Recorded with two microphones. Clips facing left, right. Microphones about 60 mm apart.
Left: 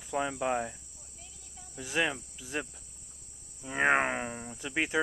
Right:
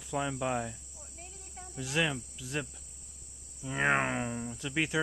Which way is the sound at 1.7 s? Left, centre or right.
Centre.